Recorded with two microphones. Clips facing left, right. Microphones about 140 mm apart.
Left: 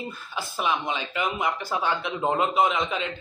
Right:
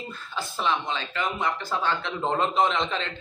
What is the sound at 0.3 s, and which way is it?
Speech, 10° left (ahead or behind).